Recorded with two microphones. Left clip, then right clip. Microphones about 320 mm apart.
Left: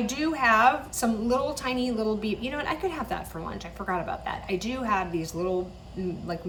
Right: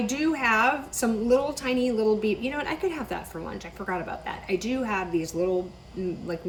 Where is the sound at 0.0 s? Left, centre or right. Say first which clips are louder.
Even; centre.